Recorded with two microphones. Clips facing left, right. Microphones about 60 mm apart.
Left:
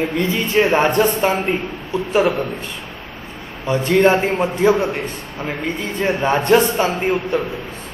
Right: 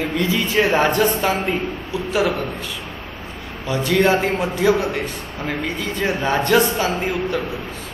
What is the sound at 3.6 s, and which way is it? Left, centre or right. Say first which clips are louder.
A man's voice: left 3 dB; left.